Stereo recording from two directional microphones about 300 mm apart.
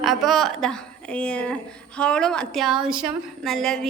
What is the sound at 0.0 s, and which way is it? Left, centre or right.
A woman's voice, centre.